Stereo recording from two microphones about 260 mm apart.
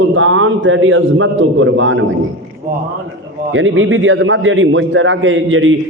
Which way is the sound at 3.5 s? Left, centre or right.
Right.